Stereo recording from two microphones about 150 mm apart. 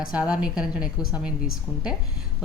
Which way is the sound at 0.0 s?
5° right (ahead or behind).